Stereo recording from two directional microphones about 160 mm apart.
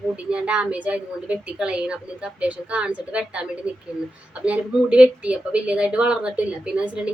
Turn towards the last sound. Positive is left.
turn(degrees=-5)  # may be behind; listen again after turning